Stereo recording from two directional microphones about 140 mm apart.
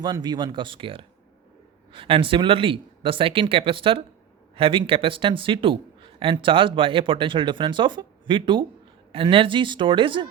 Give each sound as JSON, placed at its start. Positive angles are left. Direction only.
{"t": 0.0, "sound": "speech", "side_deg": -30}